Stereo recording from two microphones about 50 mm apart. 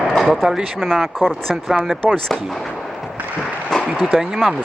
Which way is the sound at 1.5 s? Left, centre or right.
Centre.